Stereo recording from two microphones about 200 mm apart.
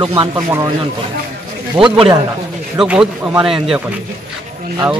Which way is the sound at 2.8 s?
5° right (ahead or behind).